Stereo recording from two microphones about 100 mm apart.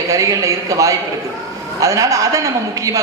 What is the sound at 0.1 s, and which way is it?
A man's voice, 35° right (ahead or behind).